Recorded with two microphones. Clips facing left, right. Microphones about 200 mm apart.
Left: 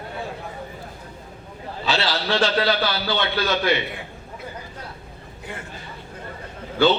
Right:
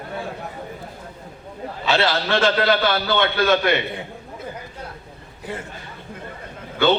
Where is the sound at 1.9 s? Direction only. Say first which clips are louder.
Right 3 dB; 50° right (ahead or behind).